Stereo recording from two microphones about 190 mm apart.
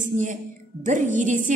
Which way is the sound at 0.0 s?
40° right (ahead or behind).